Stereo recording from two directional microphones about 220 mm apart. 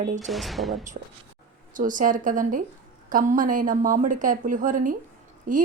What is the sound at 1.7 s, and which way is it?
A woman's voice, 35° right (ahead or behind).